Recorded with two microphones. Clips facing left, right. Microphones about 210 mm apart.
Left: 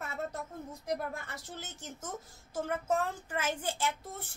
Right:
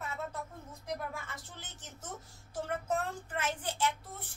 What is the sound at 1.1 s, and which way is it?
A woman's voice, 40° left (ahead or behind).